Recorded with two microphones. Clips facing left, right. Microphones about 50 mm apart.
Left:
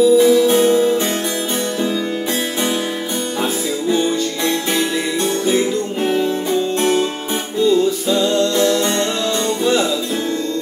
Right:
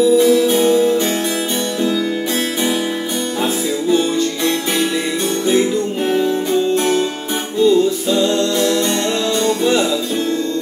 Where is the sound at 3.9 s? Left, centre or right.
Centre.